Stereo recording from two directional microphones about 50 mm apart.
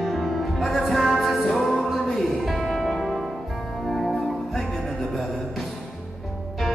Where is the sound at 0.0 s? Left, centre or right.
Centre.